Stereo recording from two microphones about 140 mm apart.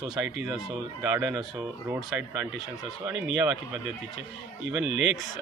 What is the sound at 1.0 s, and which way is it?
Speech, 15° right (ahead or behind).